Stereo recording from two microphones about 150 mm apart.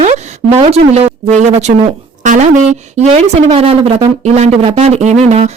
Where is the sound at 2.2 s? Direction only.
55° right (ahead or behind).